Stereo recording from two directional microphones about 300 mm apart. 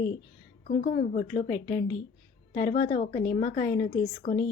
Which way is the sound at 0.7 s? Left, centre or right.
Left.